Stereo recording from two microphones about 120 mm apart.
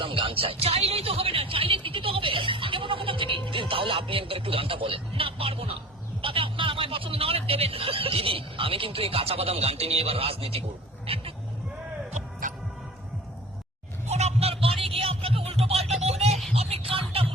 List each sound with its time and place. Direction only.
0.0 s music: 50° right (ahead or behind)
6.2 s speech: 45° right (ahead or behind)
11.0 s a sound: 50° right (ahead or behind)
12.1 s music: 90° right
14.1 s a sound: 65° right (ahead or behind)
16.6 s music: 55° right (ahead or behind)